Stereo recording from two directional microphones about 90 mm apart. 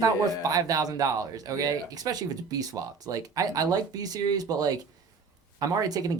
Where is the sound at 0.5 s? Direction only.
40° right (ahead or behind).